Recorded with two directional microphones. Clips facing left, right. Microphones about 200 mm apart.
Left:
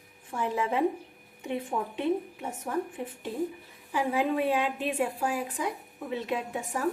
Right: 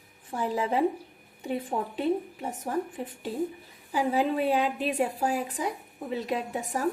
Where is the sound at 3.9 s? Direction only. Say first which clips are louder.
Right 1 dB; 35° right (ahead or behind).